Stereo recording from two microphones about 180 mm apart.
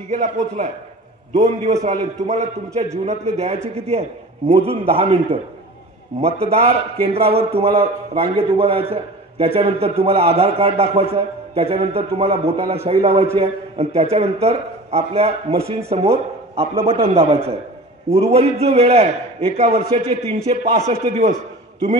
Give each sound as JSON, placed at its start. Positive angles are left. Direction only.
{"t": 1.6, "sound": "a man's voice", "side_deg": -35}